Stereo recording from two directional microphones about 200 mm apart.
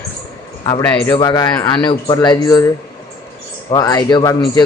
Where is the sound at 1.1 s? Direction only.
20° left (ahead or behind).